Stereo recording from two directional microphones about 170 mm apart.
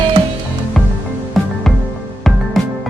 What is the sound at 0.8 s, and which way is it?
Music, centre (ahead or behind).